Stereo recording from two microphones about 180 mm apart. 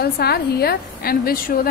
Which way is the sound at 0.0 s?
60° left (ahead or behind).